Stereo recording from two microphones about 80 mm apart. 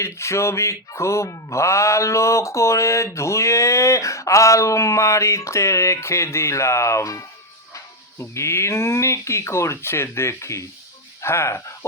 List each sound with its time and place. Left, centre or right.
0.0 s music: left
11.2 s speech: left